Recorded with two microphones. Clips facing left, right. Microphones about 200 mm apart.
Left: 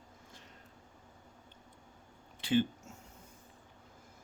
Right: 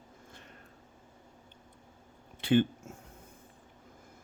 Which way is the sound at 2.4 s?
55° right (ahead or behind).